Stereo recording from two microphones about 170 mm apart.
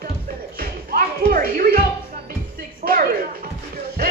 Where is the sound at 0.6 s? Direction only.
60° right (ahead or behind).